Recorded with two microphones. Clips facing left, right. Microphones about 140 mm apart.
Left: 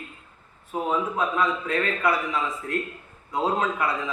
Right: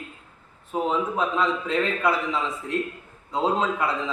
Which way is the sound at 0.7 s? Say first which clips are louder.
Right 1 dB; 20° right (ahead or behind).